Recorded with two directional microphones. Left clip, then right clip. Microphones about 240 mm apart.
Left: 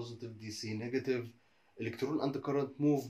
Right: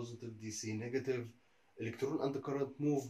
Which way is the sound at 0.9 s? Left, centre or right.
Left.